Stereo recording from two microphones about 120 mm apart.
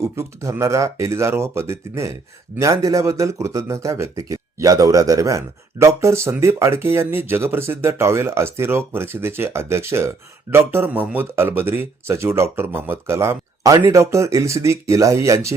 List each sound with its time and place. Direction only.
0.0 s speech: 25° right (ahead or behind)